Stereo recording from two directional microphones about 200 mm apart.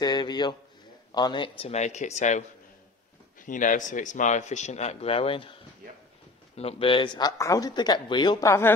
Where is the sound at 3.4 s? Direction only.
40° left (ahead or behind).